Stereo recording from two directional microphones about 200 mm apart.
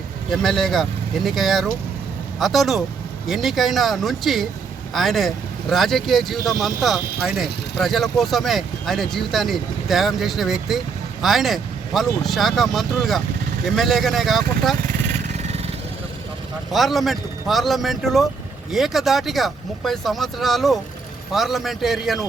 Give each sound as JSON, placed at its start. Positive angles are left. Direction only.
{"t": 0.3, "sound": "speech", "side_deg": 0}
{"t": 15.3, "sound": "vehicle", "side_deg": -30}
{"t": 16.7, "sound": "speech", "side_deg": 0}